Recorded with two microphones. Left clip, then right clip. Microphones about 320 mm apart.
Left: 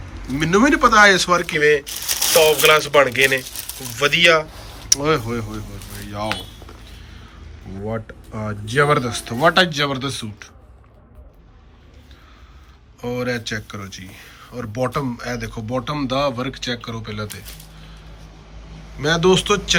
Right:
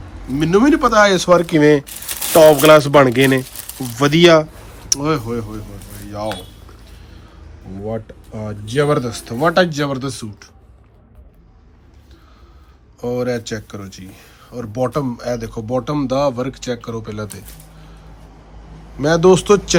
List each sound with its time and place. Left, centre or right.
0.3 s speech: centre
2.0 s crumpling: centre
2.6 s speech: centre
4.9 s speech: centre
7.9 s speech: centre
13.0 s speech: centre
18.9 s speech: centre